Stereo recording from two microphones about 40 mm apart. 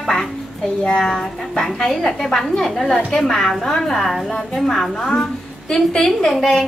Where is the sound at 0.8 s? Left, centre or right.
Left.